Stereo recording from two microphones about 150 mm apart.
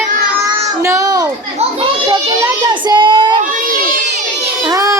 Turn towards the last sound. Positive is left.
turn(degrees=-20)  # may be behind; listen again after turning